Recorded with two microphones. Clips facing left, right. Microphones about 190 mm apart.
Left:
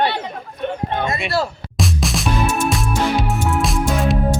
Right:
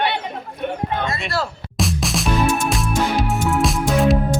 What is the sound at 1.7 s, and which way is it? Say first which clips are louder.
Music: even; centre (ahead or behind).